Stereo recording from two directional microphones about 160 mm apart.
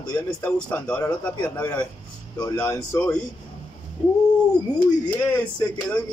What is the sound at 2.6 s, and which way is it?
Speech, 20° left (ahead or behind).